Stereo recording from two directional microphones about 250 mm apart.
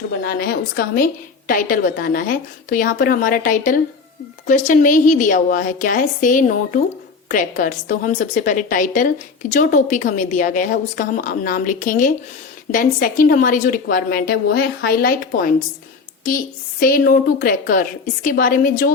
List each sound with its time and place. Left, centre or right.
0.3 s a woman's voice: left
16.8 s a woman's voice: left